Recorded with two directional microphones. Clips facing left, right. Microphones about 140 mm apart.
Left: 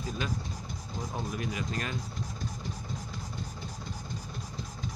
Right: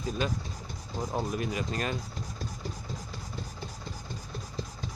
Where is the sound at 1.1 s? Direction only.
30° right (ahead or behind).